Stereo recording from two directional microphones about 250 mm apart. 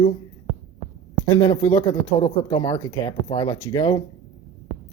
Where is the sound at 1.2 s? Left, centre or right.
Left.